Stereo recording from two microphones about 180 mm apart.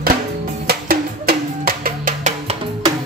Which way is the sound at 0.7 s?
60° right (ahead or behind).